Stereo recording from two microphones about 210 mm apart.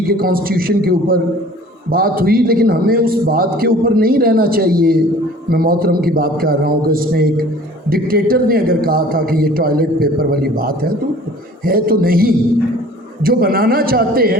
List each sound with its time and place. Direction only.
0.0 s a man's voice: 45° right (ahead or behind)